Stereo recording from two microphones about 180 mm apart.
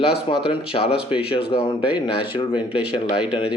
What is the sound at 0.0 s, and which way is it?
Speech, 30° left (ahead or behind).